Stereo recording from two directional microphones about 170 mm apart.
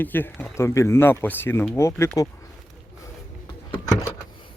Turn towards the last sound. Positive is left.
turn(degrees=20)  # may be behind; listen again after turning